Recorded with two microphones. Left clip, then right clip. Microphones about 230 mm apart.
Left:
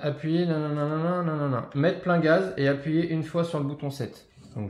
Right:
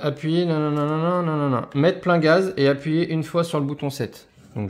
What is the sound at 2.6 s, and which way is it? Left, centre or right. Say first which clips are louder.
Speech: right 5 dB; right.